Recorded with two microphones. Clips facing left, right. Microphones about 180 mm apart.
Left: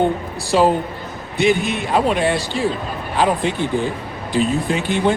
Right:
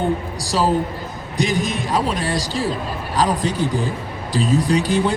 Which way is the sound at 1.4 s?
40° right (ahead or behind).